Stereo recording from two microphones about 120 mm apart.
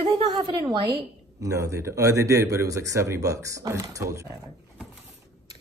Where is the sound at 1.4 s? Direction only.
25° right (ahead or behind).